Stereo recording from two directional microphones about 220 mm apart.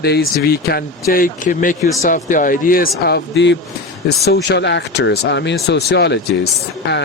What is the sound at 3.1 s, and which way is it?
Speech, 50° left (ahead or behind).